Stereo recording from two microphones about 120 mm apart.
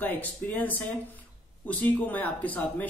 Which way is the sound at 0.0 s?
15° left (ahead or behind).